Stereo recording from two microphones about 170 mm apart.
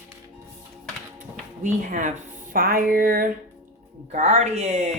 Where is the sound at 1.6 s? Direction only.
50° right (ahead or behind).